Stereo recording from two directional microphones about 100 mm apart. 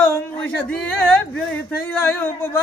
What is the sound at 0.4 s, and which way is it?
Speech, 15° left (ahead or behind).